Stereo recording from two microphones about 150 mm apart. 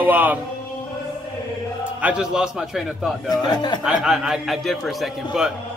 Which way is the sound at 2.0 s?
5° right (ahead or behind).